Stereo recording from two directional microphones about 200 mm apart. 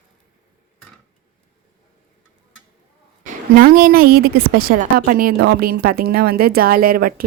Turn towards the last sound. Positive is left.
turn(degrees=-45)  # may be behind; listen again after turning